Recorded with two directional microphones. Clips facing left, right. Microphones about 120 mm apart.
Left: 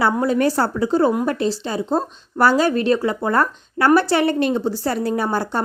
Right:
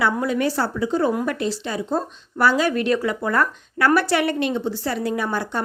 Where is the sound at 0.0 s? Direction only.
35° left (ahead or behind).